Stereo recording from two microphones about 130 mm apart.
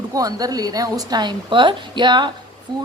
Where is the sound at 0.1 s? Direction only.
30° right (ahead or behind).